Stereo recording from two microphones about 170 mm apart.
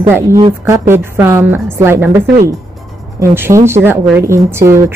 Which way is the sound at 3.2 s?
15° right (ahead or behind).